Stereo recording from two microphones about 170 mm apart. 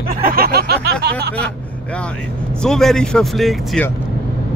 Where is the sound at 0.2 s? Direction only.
60° right (ahead or behind).